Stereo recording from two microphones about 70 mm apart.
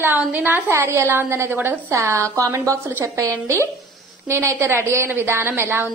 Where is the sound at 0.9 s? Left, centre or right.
Right.